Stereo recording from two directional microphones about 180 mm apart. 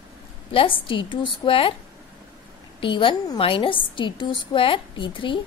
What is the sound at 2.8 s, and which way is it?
A woman's voice, 30° left (ahead or behind).